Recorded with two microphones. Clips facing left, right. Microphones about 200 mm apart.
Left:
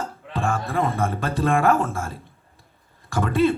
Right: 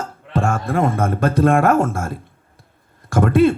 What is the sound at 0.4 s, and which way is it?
Speech, 50° right (ahead or behind).